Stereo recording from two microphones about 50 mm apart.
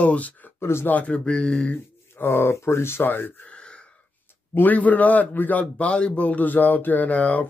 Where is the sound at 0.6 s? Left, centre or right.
Left.